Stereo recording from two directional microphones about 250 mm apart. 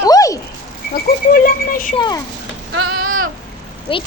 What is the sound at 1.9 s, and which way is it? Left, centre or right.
Speech, centre.